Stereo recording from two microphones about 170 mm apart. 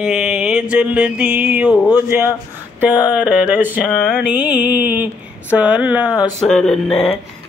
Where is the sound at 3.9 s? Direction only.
5° left (ahead or behind).